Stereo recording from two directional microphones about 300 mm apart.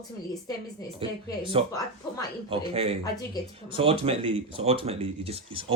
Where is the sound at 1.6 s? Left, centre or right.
Centre.